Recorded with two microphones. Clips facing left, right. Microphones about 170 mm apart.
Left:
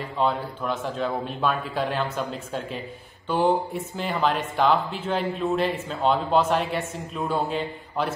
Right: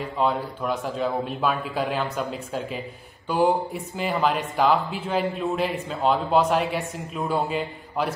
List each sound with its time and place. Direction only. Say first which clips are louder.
0.2 s speech: even; 5° right (ahead or behind)
3.3 s a sound: right 1 dB; 10° right (ahead or behind)
3.7 s speech: right 1 dB; centre (ahead or behind)